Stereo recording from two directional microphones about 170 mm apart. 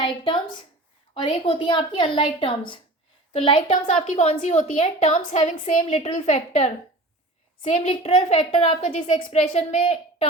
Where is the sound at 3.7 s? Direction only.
45° left (ahead or behind).